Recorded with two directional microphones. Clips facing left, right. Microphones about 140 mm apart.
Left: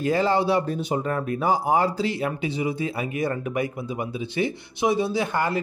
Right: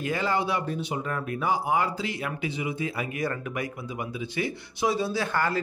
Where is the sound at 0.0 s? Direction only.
35° left (ahead or behind).